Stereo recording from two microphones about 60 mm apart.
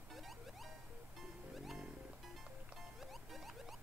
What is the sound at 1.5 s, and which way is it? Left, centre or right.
Music, centre.